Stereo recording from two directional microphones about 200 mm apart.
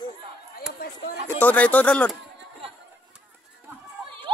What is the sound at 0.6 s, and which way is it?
Chop, 50° left (ahead or behind).